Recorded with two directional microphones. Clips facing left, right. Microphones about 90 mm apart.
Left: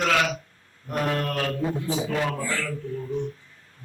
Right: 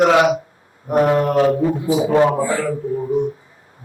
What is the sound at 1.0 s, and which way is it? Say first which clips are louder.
Mantra: right 11 dB; 20° right (ahead or behind).